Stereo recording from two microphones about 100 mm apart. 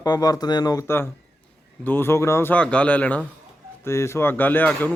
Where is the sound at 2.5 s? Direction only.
10° left (ahead or behind).